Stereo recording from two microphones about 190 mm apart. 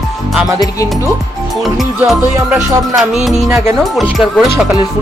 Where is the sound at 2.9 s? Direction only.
Centre (ahead or behind).